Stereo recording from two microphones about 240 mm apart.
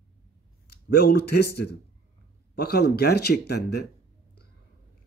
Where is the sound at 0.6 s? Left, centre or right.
Left.